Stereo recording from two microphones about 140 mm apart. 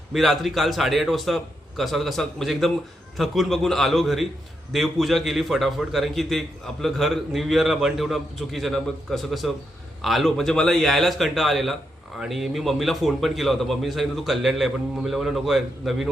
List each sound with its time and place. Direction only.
0.1 s a man's voice: centre (ahead or behind)